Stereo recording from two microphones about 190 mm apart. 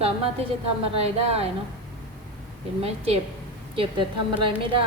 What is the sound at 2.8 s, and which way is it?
A woman's voice, 30° right (ahead or behind).